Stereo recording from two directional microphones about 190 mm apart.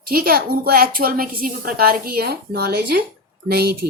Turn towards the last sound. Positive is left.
turn(degrees=-55)  # may be behind; listen again after turning